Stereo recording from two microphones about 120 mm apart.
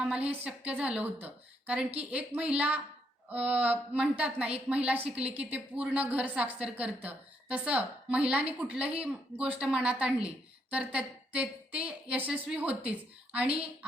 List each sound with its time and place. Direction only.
0.3 s a woman's voice: 10° right (ahead or behind)